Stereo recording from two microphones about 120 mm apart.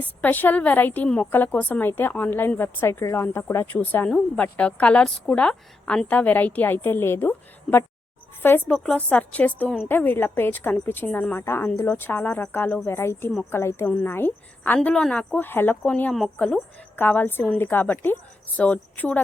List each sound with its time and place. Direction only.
0.0 s a woman's voice: 15° left (ahead or behind)
11.3 s a woman's voice: 20° left (ahead or behind)
16.1 s speech: 5° left (ahead or behind)
17.0 s a woman's voice: 15° left (ahead or behind)